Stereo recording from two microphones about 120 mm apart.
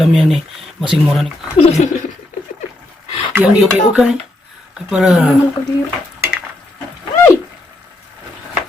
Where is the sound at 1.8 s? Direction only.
80° left.